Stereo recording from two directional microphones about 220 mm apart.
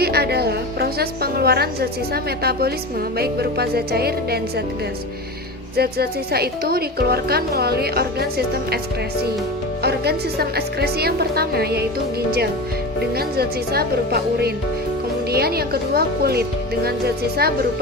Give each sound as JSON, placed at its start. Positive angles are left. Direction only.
{"t": 0.0, "sound": "a woman's voice", "side_deg": -45}
{"t": 5.7, "sound": "a woman's voice", "side_deg": -45}
{"t": 9.8, "sound": "a woman's voice", "side_deg": -45}
{"t": 13.1, "sound": "a woman's voice", "side_deg": -45}